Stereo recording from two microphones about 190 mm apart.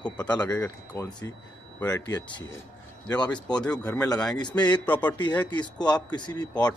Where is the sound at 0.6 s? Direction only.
10° left (ahead or behind).